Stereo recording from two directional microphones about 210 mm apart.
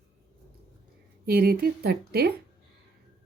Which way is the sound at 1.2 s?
45° right (ahead or behind).